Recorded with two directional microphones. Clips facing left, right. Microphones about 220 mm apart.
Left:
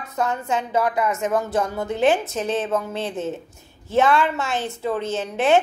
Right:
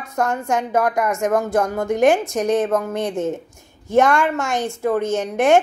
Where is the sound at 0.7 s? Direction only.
45° right (ahead or behind).